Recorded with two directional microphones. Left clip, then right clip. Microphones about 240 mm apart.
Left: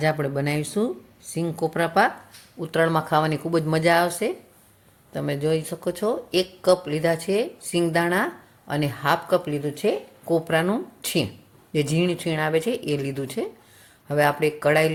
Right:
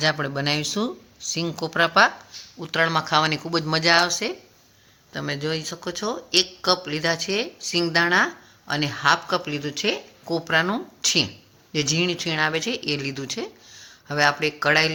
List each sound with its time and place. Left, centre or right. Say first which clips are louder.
0.0 s speech: right 1 dB; centre